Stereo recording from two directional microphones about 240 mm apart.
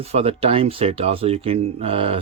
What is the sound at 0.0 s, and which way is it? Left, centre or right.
Speech, right.